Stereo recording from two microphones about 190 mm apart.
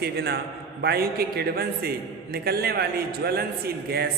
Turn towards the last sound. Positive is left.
turn(degrees=-55)  # may be behind; listen again after turning